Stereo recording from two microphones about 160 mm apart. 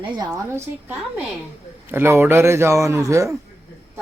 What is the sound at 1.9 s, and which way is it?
A man's voice, 15° right (ahead or behind).